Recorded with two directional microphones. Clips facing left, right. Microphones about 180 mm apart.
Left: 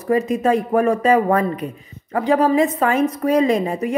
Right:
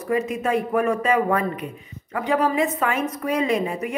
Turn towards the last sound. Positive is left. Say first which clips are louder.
# left 4 dB
turn(degrees=35)  # may be behind; listen again after turning